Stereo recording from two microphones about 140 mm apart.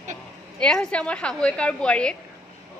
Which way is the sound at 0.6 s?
5° left (ahead or behind).